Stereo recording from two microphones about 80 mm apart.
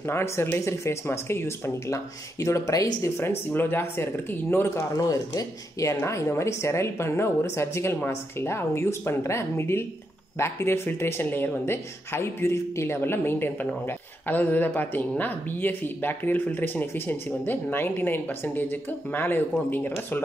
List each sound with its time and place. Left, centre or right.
0.0 s speech: left
3.2 s speech: left
4.7 s speech: left